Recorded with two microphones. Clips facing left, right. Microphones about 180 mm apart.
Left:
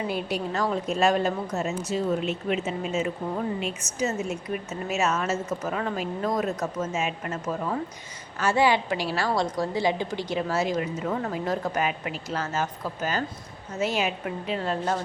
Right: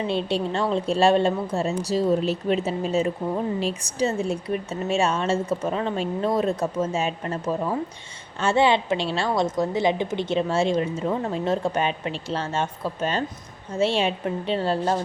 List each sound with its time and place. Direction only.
0.0 s a woman's voice: 25° right (ahead or behind)